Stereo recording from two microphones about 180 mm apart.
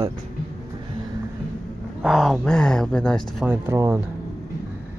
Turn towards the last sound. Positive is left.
turn(degrees=-15)  # may be behind; listen again after turning